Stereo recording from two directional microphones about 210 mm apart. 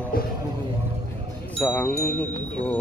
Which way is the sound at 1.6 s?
10° left (ahead or behind).